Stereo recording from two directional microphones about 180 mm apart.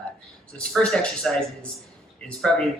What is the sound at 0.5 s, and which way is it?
Speech, 5° left (ahead or behind).